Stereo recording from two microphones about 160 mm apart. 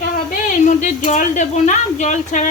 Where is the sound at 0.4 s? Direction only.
50° left (ahead or behind).